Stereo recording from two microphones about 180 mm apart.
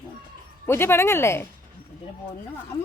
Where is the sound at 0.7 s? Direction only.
15° left (ahead or behind).